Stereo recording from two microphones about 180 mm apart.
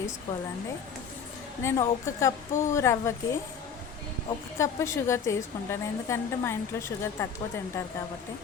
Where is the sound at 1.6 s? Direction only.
15° left (ahead or behind).